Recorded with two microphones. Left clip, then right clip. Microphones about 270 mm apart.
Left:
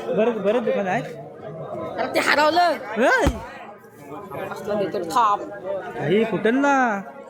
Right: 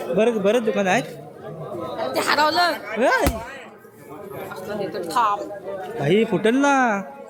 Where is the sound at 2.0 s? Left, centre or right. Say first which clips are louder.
Left 1 dB; left.